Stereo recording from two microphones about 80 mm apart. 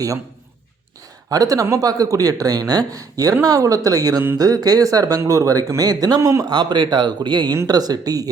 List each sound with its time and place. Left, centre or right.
1.3 s speech: right
6.5 s speech: right
7.7 s speech: right